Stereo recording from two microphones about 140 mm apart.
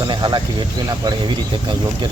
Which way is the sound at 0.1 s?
35° right (ahead or behind).